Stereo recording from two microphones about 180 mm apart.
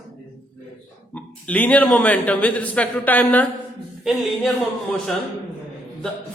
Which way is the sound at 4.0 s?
Centre (ahead or behind).